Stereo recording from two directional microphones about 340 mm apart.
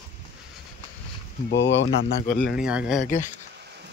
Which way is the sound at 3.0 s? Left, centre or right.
Left.